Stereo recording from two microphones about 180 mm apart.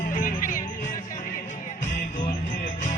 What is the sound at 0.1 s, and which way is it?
Music, 45° left (ahead or behind).